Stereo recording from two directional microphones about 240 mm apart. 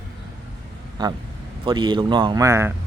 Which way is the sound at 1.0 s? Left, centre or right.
Centre.